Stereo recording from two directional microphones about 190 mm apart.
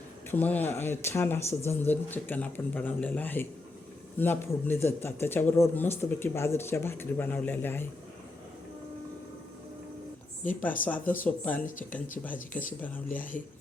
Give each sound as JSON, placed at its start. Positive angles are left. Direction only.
{"t": 0.3, "sound": "speech", "side_deg": 10}
{"t": 10.8, "sound": "speech", "side_deg": 10}
{"t": 11.6, "sound": "speech", "side_deg": 45}
{"t": 12.5, "sound": "speech", "side_deg": 10}
{"t": 13.1, "sound": "speech", "side_deg": 45}